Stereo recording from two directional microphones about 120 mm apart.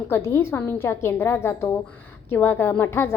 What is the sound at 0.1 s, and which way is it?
A woman's voice, 20° left (ahead or behind).